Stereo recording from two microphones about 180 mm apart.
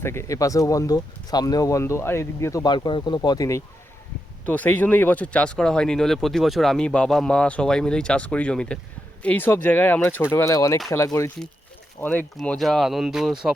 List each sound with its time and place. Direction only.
0.0 s speech: 15° left (ahead or behind)
4.4 s speech: 10° left (ahead or behind)